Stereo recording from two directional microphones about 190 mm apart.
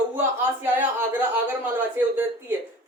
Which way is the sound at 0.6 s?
10° right (ahead or behind).